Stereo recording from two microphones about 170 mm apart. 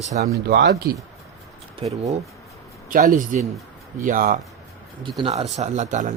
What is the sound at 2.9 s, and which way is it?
Speech, 50° right (ahead or behind).